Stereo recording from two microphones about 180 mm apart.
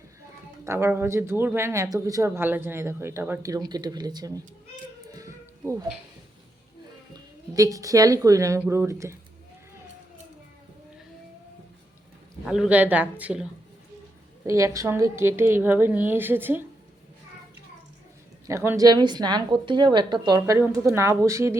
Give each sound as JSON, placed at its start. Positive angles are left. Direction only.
{"t": 0.6, "sound": "speech", "side_deg": -15}
{"t": 5.1, "sound": "a sound", "side_deg": -15}
{"t": 7.5, "sound": "speech", "side_deg": -20}
{"t": 12.5, "sound": "speech", "side_deg": -5}
{"t": 14.4, "sound": "speech", "side_deg": -15}
{"t": 18.4, "sound": "a woman's voice", "side_deg": -15}